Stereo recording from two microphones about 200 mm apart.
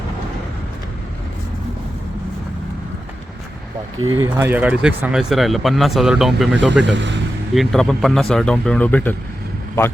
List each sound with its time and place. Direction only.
4.1 s speech: 15° right (ahead or behind)
6.9 s speech: 60° right (ahead or behind)
7.5 s speech: centre (ahead or behind)